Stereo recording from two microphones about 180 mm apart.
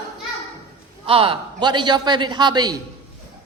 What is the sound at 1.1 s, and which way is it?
A man's voice, 30° right (ahead or behind).